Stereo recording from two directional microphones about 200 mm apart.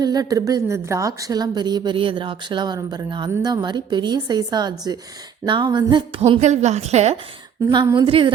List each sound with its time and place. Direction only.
0.0 s a woman's voice: 20° right (ahead or behind)
7.7 s a woman's voice: 20° right (ahead or behind)